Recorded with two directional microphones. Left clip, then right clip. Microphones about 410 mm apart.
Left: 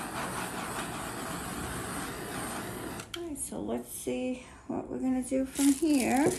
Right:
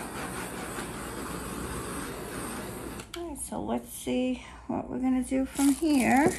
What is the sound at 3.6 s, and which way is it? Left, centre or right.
Speech, centre.